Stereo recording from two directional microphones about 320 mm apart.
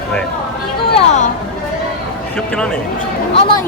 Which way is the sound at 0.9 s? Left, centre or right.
Left.